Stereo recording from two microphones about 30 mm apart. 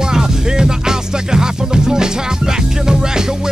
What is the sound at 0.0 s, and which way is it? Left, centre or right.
Music, right.